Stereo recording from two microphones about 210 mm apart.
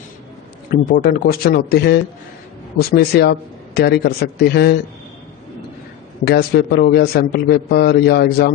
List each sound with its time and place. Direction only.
0.7 s a man's voice: 45° left (ahead or behind)
6.2 s a man's voice: 50° left (ahead or behind)